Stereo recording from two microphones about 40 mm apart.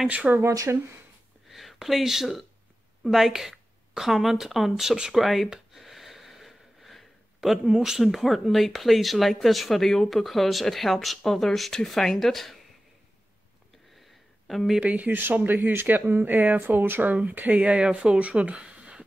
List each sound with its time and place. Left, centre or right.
0.3 s speech: right
1.5 s speech: centre
5.8 s wheeze: centre
7.6 s speech: centre
14.5 s speech: centre
14.8 s speech: right
15.4 s speech: right
17.1 s speech: right
17.6 s speech: right